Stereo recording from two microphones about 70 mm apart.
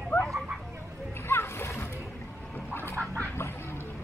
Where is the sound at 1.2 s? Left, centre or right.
Left.